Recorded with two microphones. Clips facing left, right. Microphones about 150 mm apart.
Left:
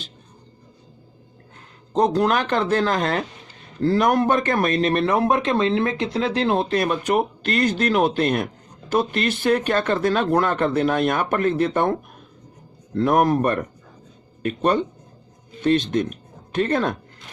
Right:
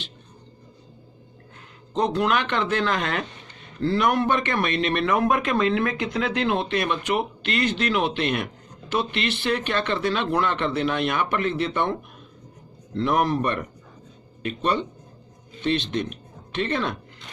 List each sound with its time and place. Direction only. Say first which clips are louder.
1.9 s a man's voice: left 4 dB; 40° left (ahead or behind)